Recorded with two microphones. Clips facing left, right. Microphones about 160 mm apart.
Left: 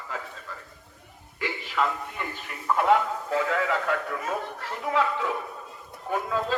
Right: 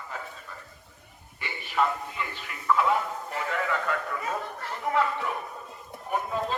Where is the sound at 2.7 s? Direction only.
70° left (ahead or behind).